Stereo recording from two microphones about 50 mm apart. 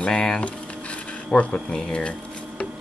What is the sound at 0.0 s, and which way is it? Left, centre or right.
Speech, left.